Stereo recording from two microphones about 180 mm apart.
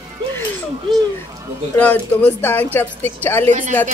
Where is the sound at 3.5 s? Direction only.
45° right (ahead or behind).